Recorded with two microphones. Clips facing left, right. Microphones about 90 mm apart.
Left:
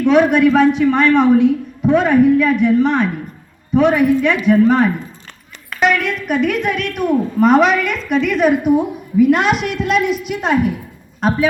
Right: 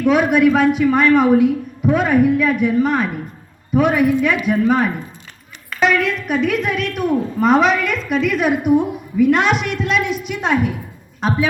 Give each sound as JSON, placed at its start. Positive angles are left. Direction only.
{"t": 0.0, "sound": "a man's voice", "side_deg": -5}